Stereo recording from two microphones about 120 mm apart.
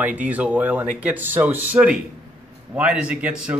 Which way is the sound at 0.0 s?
15° right (ahead or behind).